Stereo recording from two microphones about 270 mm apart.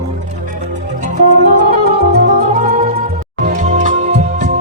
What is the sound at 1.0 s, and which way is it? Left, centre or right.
Music, right.